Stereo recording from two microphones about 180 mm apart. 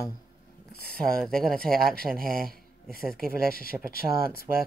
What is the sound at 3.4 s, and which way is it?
Speech, 55° left (ahead or behind).